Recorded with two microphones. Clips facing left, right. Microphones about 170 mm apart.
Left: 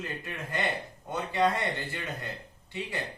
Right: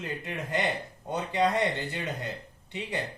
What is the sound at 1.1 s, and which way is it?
Speech, 20° right (ahead or behind).